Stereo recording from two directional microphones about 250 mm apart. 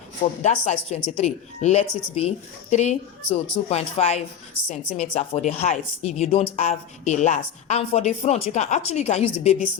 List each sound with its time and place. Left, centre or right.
0.4 s a woman's voice: left